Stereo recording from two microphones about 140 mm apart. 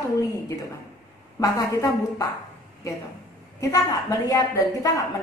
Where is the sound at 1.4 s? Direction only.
25° left (ahead or behind).